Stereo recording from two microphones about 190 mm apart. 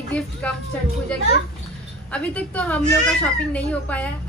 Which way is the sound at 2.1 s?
5° left (ahead or behind).